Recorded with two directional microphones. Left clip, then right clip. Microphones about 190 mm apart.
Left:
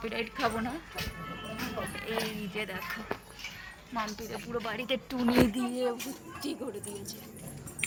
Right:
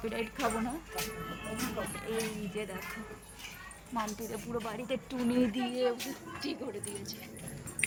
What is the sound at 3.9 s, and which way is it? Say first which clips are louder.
Speech: left 1 dB; 10° right (ahead or behind).